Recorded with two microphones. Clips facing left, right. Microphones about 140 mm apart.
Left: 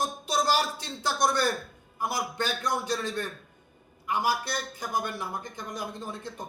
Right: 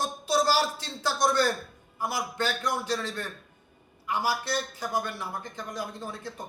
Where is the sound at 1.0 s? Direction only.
15° left (ahead or behind).